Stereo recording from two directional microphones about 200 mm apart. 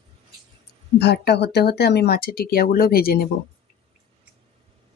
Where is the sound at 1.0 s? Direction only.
55° left (ahead or behind).